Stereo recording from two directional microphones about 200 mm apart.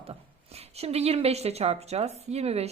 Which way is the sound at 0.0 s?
30° right (ahead or behind).